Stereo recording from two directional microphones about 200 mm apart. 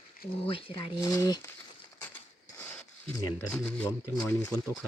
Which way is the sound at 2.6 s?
10° left (ahead or behind).